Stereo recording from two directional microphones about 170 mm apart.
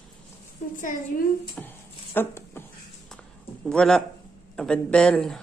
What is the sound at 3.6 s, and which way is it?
Speech, 5° left (ahead or behind).